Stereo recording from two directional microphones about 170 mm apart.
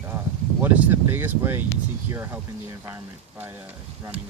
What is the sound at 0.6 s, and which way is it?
Speech, 10° right (ahead or behind).